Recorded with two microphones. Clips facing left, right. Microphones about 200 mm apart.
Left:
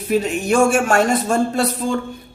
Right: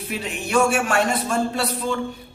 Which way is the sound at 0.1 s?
45° left (ahead or behind).